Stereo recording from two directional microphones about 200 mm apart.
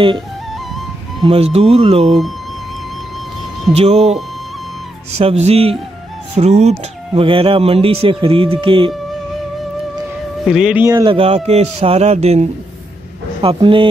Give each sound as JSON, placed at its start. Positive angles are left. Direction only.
{"t": 1.2, "sound": "a man's voice", "side_deg": -30}
{"t": 3.7, "sound": "a man's voice", "side_deg": -35}
{"t": 10.4, "sound": "speech", "side_deg": 0}
{"t": 10.9, "sound": "speech", "side_deg": -20}
{"t": 11.1, "sound": "a man's voice", "side_deg": -30}